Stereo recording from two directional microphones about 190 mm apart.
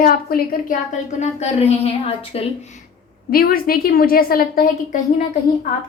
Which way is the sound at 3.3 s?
50° left (ahead or behind).